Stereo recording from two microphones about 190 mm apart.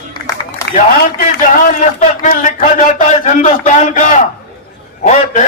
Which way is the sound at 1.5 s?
40° left (ahead or behind).